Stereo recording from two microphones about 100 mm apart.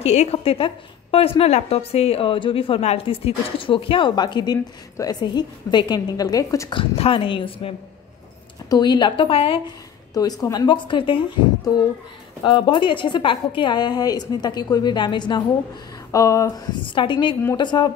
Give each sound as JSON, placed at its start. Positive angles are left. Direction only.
{"t": 0.0, "sound": "a woman's voice", "side_deg": 90}
{"t": 6.7, "sound": "a woman's voice", "side_deg": 60}
{"t": 8.6, "sound": "a woman's voice", "side_deg": 45}
{"t": 10.1, "sound": "a woman's voice", "side_deg": 40}
{"t": 12.4, "sound": "a woman's voice", "side_deg": 50}
{"t": 16.1, "sound": "a woman's voice", "side_deg": 35}
{"t": 16.8, "sound": "a woman's voice", "side_deg": 55}